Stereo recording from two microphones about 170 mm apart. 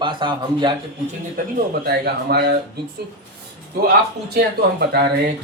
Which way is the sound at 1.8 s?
65° right (ahead or behind).